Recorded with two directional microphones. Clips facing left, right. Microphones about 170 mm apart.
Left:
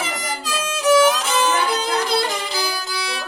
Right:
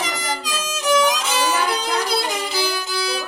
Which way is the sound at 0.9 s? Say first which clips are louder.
Left 3 dB; 5° left (ahead or behind).